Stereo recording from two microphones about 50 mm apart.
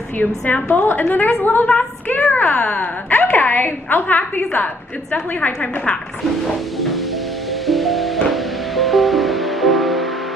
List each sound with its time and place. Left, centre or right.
0.2 s a woman's voice: left
2.0 s a sound: left
2.5 s a woman's voice: left
2.8 s a woman's voice: left
7.6 s music: centre